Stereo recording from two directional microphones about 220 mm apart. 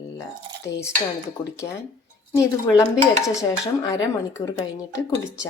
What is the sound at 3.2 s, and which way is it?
Speech, 15° left (ahead or behind).